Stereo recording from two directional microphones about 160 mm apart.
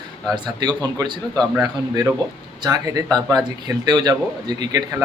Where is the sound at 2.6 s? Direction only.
25° right (ahead or behind).